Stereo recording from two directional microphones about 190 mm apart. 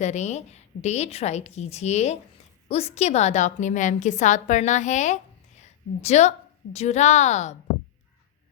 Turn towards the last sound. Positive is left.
turn(degrees=35)  # may be behind; listen again after turning